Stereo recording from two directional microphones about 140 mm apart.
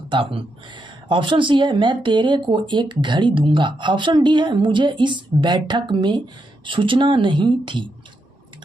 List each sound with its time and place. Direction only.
0.1 s speech: 35° right (ahead or behind)